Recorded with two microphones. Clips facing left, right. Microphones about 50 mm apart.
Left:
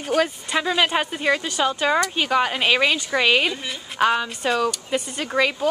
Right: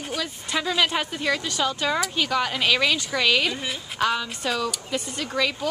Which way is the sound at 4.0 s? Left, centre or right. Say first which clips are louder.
Left 5 dB; left.